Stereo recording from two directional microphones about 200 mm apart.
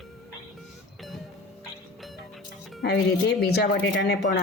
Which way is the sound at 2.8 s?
55° left (ahead or behind).